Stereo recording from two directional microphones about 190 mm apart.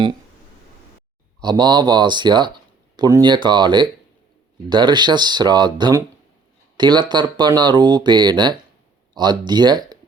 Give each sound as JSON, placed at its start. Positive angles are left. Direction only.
{"t": 1.4, "sound": "speech", "side_deg": -20}